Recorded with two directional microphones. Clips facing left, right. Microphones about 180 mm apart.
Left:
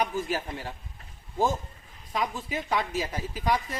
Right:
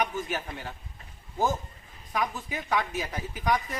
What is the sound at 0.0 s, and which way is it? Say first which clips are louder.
Speech: left 2 dB; 30° left (ahead or behind).